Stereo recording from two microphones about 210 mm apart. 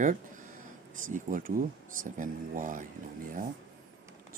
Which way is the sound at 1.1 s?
40° right (ahead or behind).